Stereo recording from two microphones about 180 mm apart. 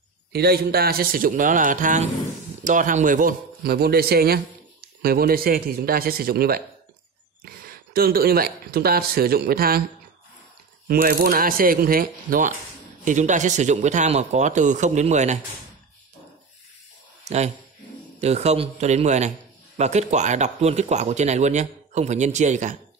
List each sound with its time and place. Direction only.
0.3 s a man's voice: 60° right (ahead or behind)
10.9 s a man's voice: 55° right (ahead or behind); by 15.3 s 40° right (ahead or behind)
18.2 s speech: 35° right (ahead or behind)